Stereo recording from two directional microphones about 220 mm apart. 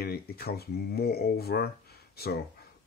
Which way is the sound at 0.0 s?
45° left (ahead or behind).